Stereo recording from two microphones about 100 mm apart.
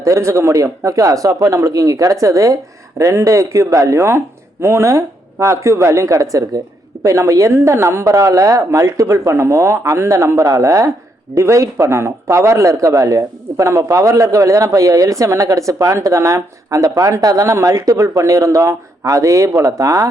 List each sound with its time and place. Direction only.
0.0 s speech: 30° right (ahead or behind)